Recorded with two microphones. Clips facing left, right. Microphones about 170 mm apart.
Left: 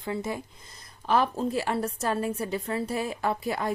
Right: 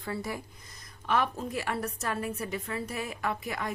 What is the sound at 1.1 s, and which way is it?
A woman's voice, 30° left (ahead or behind).